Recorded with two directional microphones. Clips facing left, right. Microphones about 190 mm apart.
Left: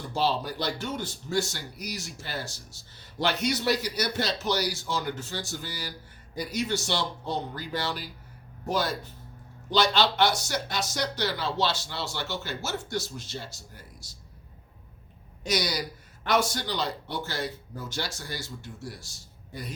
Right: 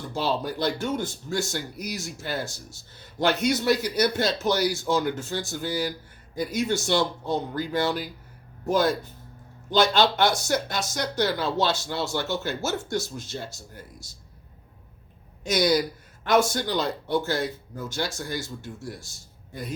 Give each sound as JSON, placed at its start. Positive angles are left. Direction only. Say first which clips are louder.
{"t": 0.2, "sound": "speech", "louder": "right 1 dB", "side_deg": -50}
{"t": 9.6, "sound": "speech", "louder": "right 3 dB", "side_deg": -50}
{"t": 15.4, "sound": "speech", "louder": "right 7 dB", "side_deg": -50}